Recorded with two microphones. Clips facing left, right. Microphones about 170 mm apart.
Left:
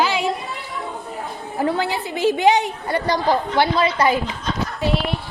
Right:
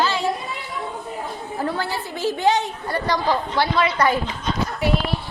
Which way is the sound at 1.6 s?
15° left (ahead or behind).